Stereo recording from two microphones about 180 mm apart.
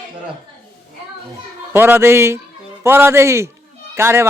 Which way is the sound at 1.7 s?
10° right (ahead or behind).